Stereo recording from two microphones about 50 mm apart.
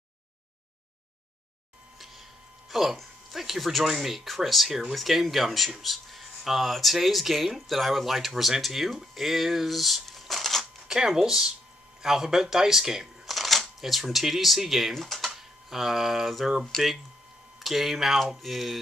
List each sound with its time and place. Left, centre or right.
2.7 s speech: centre
10.9 s speech: centre